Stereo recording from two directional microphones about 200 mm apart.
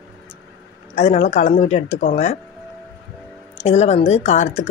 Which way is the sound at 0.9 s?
35° left (ahead or behind).